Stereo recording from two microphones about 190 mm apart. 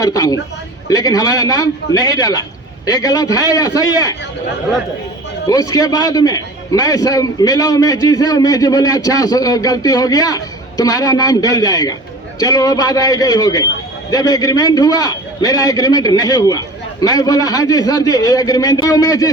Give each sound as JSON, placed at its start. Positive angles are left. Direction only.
{"t": 0.0, "sound": "a man's voice", "side_deg": 20}
{"t": 5.5, "sound": "a man's voice", "side_deg": 20}